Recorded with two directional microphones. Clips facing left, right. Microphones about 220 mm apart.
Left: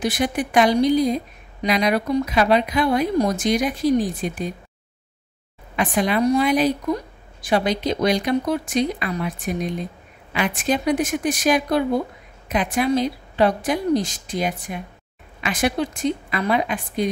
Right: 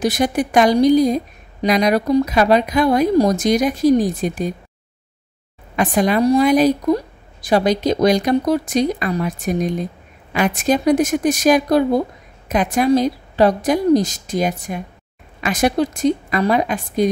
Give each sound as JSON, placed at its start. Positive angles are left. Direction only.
{"t": 0.0, "sound": "a woman's voice", "side_deg": -40}
{"t": 5.8, "sound": "a woman's voice", "side_deg": -40}